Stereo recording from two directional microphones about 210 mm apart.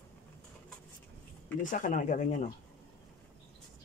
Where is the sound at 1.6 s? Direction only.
40° left (ahead or behind).